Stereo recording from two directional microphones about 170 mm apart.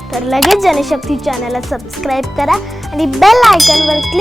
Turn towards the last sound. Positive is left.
turn(degrees=0)  # may be behind; listen again after turning